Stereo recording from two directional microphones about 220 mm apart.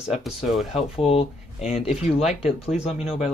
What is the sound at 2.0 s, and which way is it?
Speech, 30° left (ahead or behind).